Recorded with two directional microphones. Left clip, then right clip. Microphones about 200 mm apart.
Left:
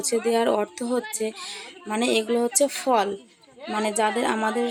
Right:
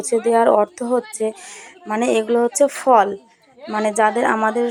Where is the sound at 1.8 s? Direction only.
Centre (ahead or behind).